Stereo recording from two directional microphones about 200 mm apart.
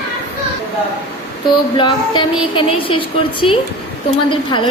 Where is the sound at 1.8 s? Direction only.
25° left (ahead or behind).